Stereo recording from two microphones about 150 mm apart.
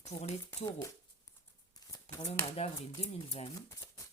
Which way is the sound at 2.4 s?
45° left (ahead or behind).